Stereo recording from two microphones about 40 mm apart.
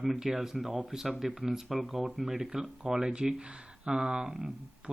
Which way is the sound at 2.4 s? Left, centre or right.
Centre.